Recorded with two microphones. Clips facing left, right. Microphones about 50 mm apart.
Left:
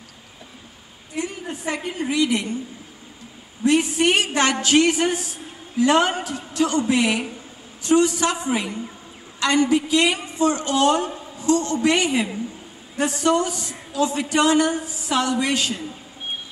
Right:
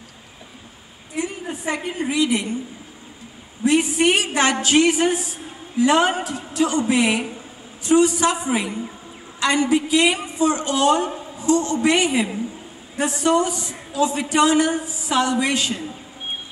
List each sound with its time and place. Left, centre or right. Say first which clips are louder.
1.1 s a woman's voice: right 2 dB; centre
3.6 s a woman's voice: right 1 dB; centre
10.7 s a woman's voice: right 1 dB; centre
11.8 s a woman's voice: right 1 dB; centre